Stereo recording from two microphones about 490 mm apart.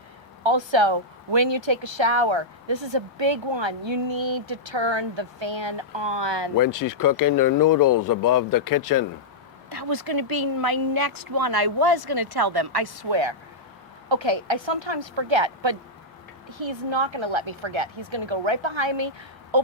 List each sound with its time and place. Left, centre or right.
0.4 s speech: right
6.6 s speech: left
9.6 s a woman's voice: right